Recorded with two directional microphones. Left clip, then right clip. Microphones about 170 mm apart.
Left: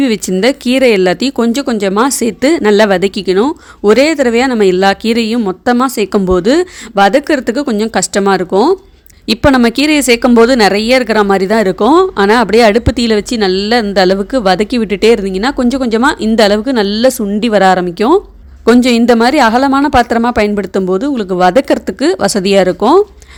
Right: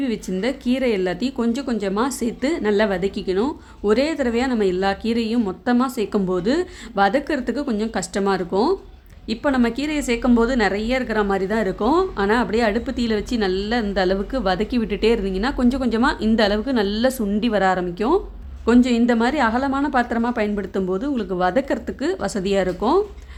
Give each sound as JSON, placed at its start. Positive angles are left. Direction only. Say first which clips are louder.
{"t": 0.0, "sound": "speech", "louder": "left 13 dB", "side_deg": 50}